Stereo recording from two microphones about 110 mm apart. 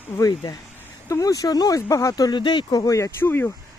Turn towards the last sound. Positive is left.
turn(degrees=20)  # may be behind; listen again after turning